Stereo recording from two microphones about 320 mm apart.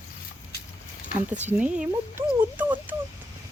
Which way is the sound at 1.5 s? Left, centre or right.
Centre.